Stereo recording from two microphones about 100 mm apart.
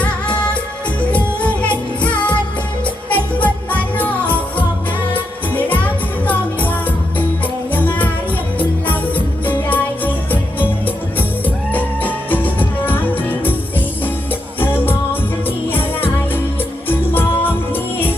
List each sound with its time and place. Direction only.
1.1 s music: 15° left (ahead or behind)